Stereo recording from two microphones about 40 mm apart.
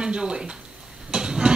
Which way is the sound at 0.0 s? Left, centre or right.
Right.